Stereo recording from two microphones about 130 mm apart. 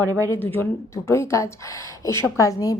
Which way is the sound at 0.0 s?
25° right (ahead or behind).